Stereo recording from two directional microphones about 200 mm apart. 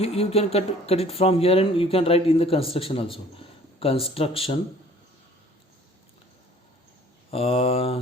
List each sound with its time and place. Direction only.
0.0 s speech: 30° left (ahead or behind)
7.3 s speech: 30° left (ahead or behind)